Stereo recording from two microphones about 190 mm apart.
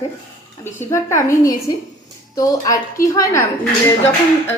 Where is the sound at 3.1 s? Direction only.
15° left (ahead or behind).